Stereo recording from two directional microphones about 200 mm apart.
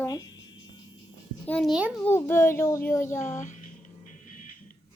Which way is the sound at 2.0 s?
10° left (ahead or behind).